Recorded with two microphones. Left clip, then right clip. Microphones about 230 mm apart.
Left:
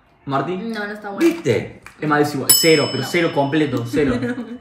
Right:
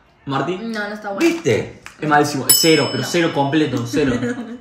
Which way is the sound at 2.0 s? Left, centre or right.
Centre.